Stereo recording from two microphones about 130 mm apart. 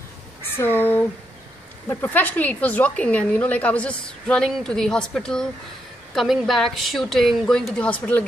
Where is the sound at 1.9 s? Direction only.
15° left (ahead or behind).